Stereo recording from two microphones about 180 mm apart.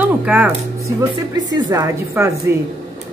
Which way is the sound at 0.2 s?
10° right (ahead or behind).